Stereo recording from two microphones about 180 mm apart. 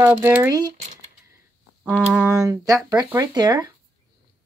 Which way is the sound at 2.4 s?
20° right (ahead or behind).